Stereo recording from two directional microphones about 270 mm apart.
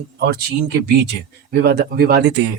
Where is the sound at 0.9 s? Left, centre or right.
Right.